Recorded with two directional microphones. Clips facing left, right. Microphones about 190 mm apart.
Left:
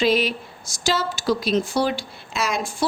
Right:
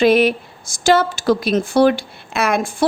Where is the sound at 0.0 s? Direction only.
55° right (ahead or behind).